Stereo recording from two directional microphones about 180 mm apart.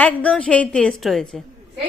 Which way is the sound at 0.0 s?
5° left (ahead or behind).